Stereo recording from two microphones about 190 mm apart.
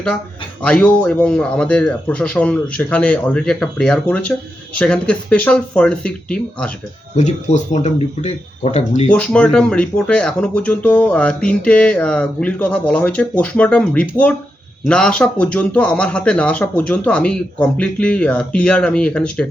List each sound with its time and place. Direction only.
0.6 s speech: 5° left (ahead or behind)
7.2 s speech: 40° left (ahead or behind)
9.0 s speech: 5° left (ahead or behind)